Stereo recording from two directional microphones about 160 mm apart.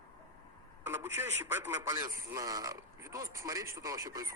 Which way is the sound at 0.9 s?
15° right (ahead or behind).